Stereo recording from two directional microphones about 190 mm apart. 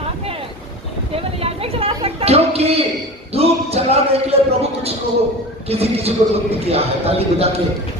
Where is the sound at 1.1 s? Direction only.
30° right (ahead or behind).